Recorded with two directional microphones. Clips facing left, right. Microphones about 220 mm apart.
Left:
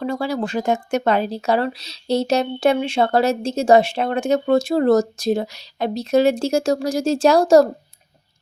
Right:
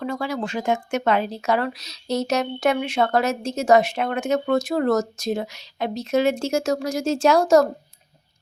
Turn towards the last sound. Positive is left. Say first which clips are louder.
# left 3 dB
turn(degrees=35)  # may be behind; listen again after turning